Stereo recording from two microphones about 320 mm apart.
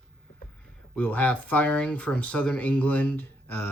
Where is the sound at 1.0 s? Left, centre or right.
Centre.